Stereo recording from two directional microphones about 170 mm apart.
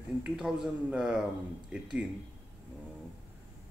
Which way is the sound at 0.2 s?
5° right (ahead or behind).